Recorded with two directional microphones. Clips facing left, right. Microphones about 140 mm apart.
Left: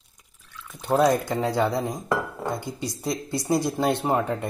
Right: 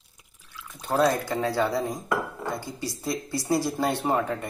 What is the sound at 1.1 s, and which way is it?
Speech, 20° left (ahead or behind).